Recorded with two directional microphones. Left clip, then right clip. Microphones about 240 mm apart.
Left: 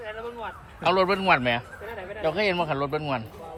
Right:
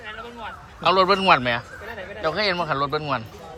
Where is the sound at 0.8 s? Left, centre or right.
Centre.